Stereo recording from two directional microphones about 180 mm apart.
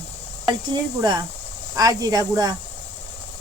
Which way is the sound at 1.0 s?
25° right (ahead or behind).